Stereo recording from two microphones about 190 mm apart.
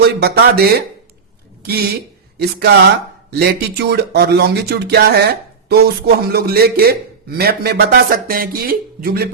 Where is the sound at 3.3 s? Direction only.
55° right (ahead or behind).